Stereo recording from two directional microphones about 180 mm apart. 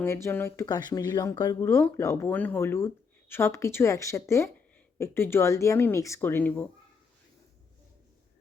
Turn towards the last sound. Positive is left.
turn(degrees=10)  # may be behind; listen again after turning